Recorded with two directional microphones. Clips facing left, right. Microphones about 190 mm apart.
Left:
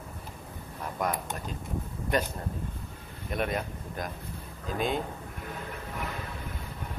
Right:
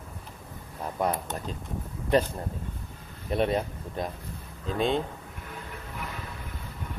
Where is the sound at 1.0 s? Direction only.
30° right (ahead or behind).